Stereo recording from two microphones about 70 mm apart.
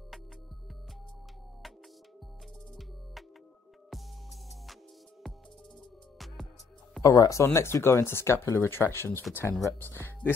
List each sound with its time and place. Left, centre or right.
6.1 s music: centre
7.0 s speech: left
7.4 s speech: left